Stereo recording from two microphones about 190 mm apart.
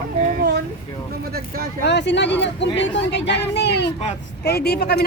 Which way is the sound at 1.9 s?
65° left (ahead or behind).